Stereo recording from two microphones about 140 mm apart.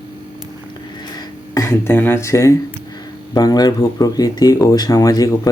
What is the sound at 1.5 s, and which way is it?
Speech, 20° left (ahead or behind).